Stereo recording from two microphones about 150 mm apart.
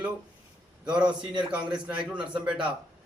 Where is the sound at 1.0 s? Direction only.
30° right (ahead or behind).